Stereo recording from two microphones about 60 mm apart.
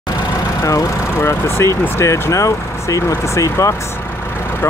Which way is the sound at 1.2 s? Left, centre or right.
Left.